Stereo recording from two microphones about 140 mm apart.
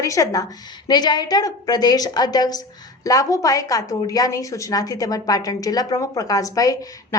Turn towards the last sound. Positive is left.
turn(degrees=25)  # may be behind; listen again after turning